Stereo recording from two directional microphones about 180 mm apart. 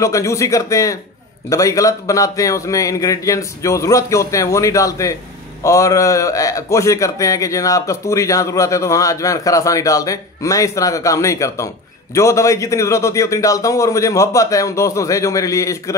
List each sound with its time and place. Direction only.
0.0 s a man's voice: 15° left (ahead or behind)